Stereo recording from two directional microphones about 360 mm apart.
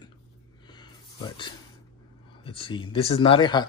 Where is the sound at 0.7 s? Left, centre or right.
Centre.